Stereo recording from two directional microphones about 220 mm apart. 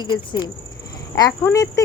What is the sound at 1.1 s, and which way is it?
Speech, 15° left (ahead or behind).